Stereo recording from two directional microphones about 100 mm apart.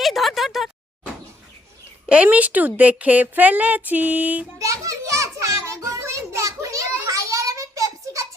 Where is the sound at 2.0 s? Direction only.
15° right (ahead or behind).